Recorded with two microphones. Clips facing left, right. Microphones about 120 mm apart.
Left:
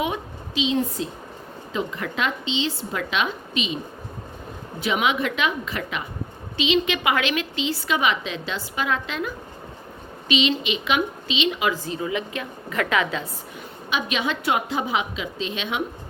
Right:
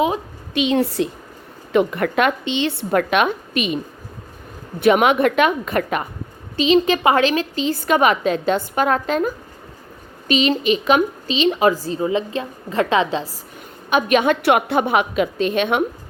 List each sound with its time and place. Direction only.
0.5 s a woman's voice: 65° right (ahead or behind)
1.7 s speech: 60° right (ahead or behind)
4.8 s a woman's voice: 55° right (ahead or behind)
6.6 s a woman's voice: 40° right (ahead or behind)
13.9 s speech: 50° right (ahead or behind)